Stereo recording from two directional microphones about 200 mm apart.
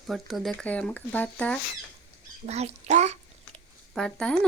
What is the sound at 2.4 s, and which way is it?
Speech, 30° right (ahead or behind).